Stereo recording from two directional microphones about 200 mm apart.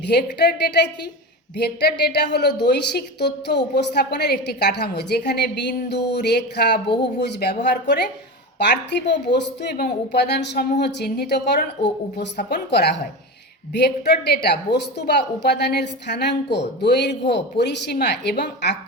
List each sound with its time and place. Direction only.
0.1 s a woman's voice: 55° left (ahead or behind)
13.7 s a woman's voice: 55° left (ahead or behind)